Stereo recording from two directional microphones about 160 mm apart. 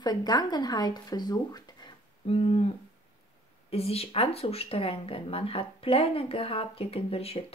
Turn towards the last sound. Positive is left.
turn(degrees=35)  # may be behind; listen again after turning